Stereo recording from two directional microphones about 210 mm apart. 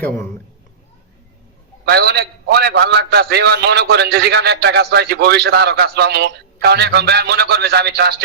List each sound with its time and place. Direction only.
1.8 s a man's voice: 50° right (ahead or behind)